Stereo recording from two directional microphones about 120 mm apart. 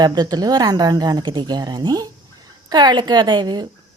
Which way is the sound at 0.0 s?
35° right (ahead or behind).